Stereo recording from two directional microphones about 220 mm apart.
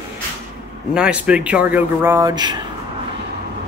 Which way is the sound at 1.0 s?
5° right (ahead or behind).